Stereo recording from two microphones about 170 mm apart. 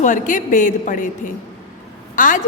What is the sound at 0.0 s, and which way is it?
A woman's voice, 50° left (ahead or behind).